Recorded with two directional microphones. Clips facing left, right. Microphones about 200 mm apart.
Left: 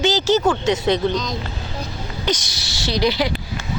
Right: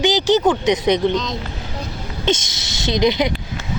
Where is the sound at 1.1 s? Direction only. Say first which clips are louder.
Right 2 dB; centre (ahead or behind).